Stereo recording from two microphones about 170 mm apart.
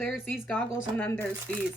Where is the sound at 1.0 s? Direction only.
10° left (ahead or behind).